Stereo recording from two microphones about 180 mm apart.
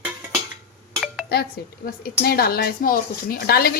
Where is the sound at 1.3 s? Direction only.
60° left (ahead or behind).